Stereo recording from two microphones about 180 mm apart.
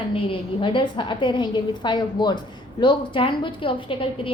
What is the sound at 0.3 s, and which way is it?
A woman's voice, 30° left (ahead or behind).